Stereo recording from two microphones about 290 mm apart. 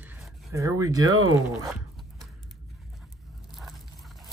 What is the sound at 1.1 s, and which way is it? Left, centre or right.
Speech, right.